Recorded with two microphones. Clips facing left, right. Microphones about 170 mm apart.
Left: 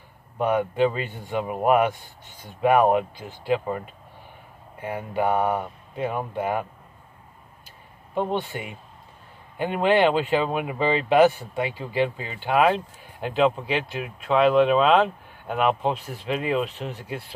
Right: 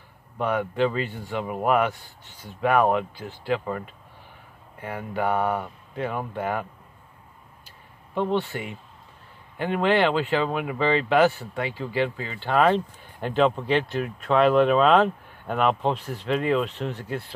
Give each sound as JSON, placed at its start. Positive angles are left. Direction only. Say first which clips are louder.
{"t": 0.4, "sound": "speech", "louder": "left 2 dB", "side_deg": 15}
{"t": 8.1, "sound": "speech", "louder": "right 1 dB", "side_deg": 15}